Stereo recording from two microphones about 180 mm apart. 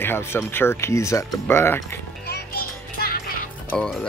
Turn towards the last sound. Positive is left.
turn(degrees=5)  # may be behind; listen again after turning